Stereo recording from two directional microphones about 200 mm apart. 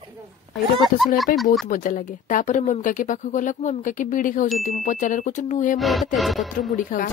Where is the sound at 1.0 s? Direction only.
Centre (ahead or behind).